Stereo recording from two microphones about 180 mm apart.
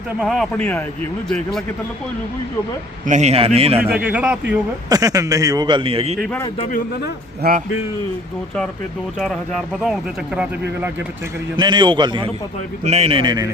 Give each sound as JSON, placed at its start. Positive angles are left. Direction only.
{"t": 0.2, "sound": "speech", "side_deg": 0}
{"t": 3.1, "sound": "speech", "side_deg": -40}
{"t": 3.8, "sound": "speech", "side_deg": -10}
{"t": 4.9, "sound": "a man's voice", "side_deg": -20}
{"t": 6.1, "sound": "speech", "side_deg": 0}
{"t": 6.7, "sound": "a man's voice", "side_deg": 50}
{"t": 9.1, "sound": "speech", "side_deg": 5}
{"t": 11.5, "sound": "a man's voice", "side_deg": -25}
{"t": 12.8, "sound": "a man's voice", "side_deg": -35}